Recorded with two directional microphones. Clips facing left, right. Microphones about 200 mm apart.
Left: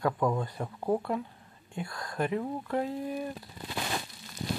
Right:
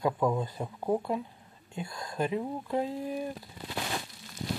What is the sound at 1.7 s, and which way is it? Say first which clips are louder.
Speech: even; 25° right (ahead or behind).